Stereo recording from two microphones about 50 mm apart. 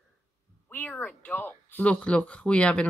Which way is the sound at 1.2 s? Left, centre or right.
Left.